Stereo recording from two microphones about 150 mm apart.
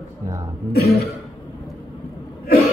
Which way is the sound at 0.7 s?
90° left.